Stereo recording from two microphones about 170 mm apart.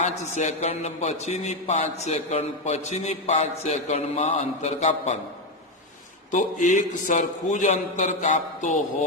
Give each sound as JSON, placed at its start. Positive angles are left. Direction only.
{"t": 0.0, "sound": "a man's voice", "side_deg": 45}
{"t": 6.3, "sound": "a man's voice", "side_deg": 50}